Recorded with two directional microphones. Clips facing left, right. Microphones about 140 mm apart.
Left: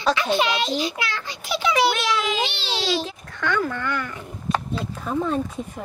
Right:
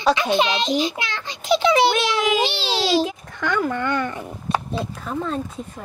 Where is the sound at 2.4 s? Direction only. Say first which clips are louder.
Right 4 dB; 35° right (ahead or behind).